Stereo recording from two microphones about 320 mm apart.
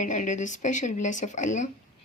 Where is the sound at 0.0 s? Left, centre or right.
Left.